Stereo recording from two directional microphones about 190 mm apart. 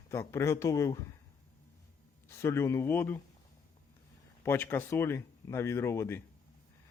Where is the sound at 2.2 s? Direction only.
15° left (ahead or behind).